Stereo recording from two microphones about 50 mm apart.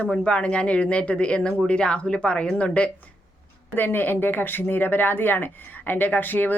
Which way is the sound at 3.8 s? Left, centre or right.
Left.